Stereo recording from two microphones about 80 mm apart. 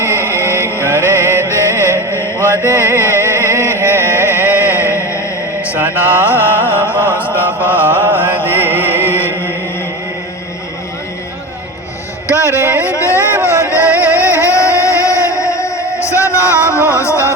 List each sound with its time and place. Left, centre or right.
0.0 s music: right
2.1 s mantra: left
2.6 s music: right
4.4 s a sound: right
5.6 s mantra: right
6.7 s music: left
7.3 s chant: right
8.4 s music: right
12.5 s a sound: right
12.8 s a sound: left
13.3 s a sound: right
13.8 s music: right
14.2 s music: left